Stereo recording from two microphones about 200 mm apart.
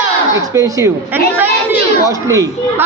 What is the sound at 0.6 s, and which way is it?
Speech, 15° right (ahead or behind).